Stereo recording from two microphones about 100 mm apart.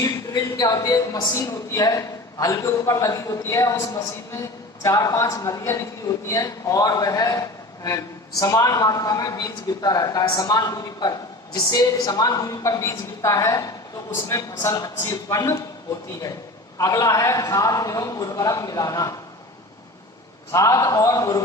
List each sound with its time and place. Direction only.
0.0 s a woman's voice: 40° left (ahead or behind)
16.7 s a woman's voice: 35° left (ahead or behind)
20.5 s a woman's voice: 35° left (ahead or behind)